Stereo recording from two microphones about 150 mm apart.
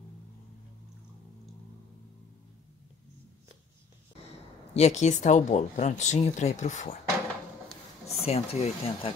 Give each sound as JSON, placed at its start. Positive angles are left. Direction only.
{"t": 4.7, "sound": "speech", "side_deg": 50}
{"t": 8.1, "sound": "speech", "side_deg": 45}